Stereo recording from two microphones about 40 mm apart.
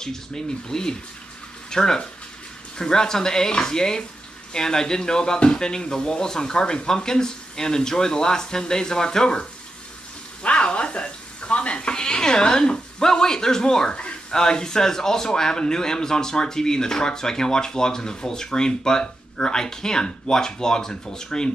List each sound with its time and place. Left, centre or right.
0.0 s a man's voice: centre
10.4 s sheep: left
14.3 s a man's voice: centre